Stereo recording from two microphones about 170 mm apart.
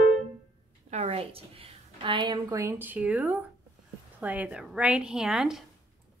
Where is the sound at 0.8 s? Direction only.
40° right (ahead or behind).